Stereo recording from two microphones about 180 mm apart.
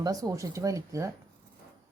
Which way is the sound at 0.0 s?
20° right (ahead or behind).